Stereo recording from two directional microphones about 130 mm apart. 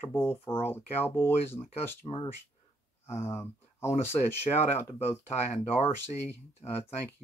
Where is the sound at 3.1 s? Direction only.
20° left (ahead or behind).